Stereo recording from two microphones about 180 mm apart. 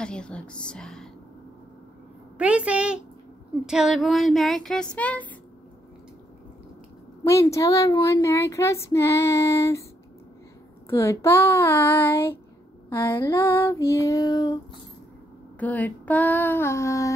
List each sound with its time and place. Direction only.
0.0 s a sound: 5° left (ahead or behind)
2.3 s a woman's voice: 5° right (ahead or behind)
3.6 s a sound: 5° right (ahead or behind)
7.2 s speech: 15° left (ahead or behind)
10.9 s speech: 15° left (ahead or behind)
15.6 s speech: 10° left (ahead or behind)